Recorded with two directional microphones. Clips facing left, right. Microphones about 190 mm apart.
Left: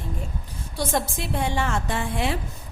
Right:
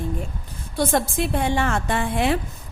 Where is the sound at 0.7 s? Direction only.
55° right (ahead or behind).